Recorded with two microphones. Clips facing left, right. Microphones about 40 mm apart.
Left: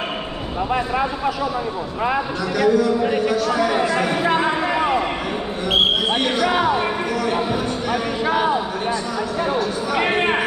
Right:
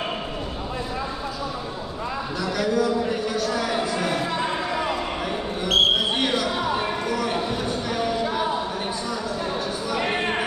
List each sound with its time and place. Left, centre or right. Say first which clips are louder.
2.5 s a man's voice: left 6 dB; centre
4.6 s a sound: left 6 dB; left
6.1 s a man's voice: left 4 dB; centre
6.6 s speech: left 6 dB; left
7.1 s speech: left 3 dB; centre
9.4 s a sound: left 6 dB; left